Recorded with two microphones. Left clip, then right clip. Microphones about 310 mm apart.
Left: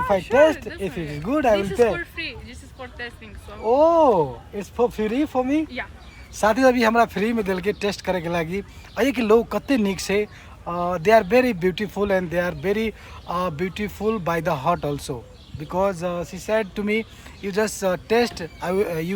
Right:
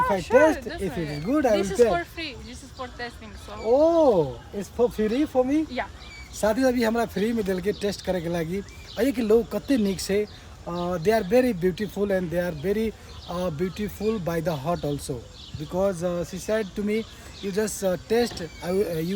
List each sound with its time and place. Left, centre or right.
0.3 s speech: centre
1.9 s speech: centre
3.7 s speech: centre